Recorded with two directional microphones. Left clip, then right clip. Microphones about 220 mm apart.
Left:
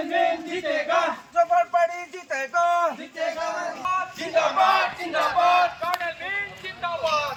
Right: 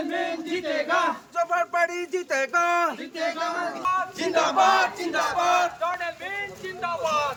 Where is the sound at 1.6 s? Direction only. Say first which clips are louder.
Left 3 dB; 25° right (ahead or behind).